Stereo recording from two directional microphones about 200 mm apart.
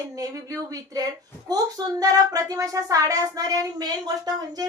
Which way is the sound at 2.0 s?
20° right (ahead or behind).